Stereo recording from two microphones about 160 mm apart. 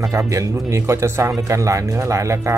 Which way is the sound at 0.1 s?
20° right (ahead or behind).